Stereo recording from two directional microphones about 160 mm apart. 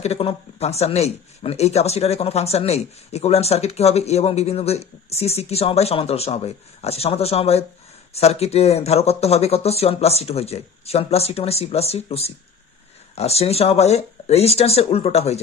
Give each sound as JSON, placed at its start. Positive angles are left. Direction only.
{"t": 0.0, "sound": "speech", "side_deg": 40}